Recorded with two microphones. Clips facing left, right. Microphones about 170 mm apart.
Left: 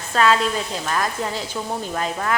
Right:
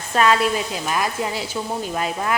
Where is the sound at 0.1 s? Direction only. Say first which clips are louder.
Right 1 dB; 15° right (ahead or behind).